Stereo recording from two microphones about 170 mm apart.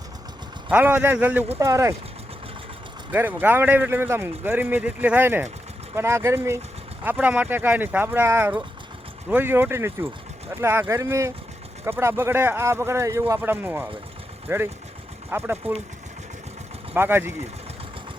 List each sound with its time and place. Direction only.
0.7 s a man's voice: 10° right (ahead or behind)
3.1 s a man's voice: 10° right (ahead or behind)
16.9 s a man's voice: 15° right (ahead or behind)